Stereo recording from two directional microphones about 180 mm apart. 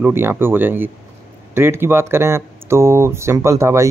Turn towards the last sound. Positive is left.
turn(degrees=-15)  # may be behind; listen again after turning